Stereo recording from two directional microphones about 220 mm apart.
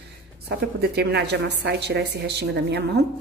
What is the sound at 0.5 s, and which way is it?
A woman's voice, 45° right (ahead or behind).